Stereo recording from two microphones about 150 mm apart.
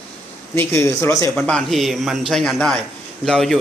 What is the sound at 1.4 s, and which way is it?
Speech, 5° left (ahead or behind).